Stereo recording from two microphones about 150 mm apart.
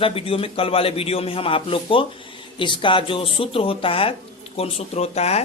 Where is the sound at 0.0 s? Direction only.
40° left (ahead or behind).